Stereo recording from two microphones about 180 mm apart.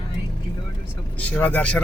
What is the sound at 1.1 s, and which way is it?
Speech, 5° left (ahead or behind).